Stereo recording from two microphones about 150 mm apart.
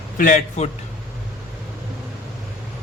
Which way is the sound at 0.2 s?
60° left (ahead or behind).